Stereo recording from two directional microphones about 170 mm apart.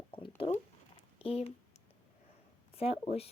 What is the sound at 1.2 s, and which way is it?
Speech, 35° left (ahead or behind).